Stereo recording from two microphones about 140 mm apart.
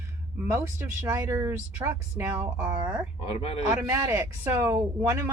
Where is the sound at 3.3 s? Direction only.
45° left (ahead or behind).